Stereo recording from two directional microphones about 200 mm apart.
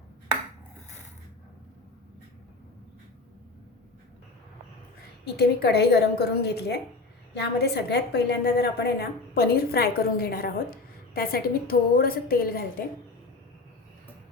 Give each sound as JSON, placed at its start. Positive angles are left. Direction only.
{"t": 5.2, "sound": "a woman's voice", "side_deg": 55}